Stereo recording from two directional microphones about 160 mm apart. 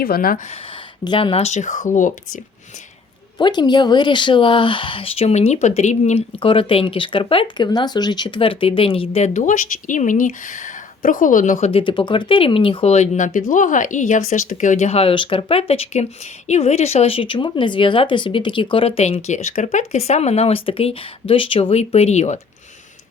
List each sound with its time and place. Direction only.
0.0 s speech: 65° left (ahead or behind)
1.0 s speech: 30° left (ahead or behind); by 2.4 s 55° left (ahead or behind)
3.3 s speech: 25° left (ahead or behind); by 11.7 s 50° left (ahead or behind)
11.7 s speech: 30° left (ahead or behind)